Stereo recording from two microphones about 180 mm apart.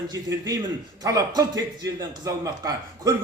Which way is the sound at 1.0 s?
20° right (ahead or behind).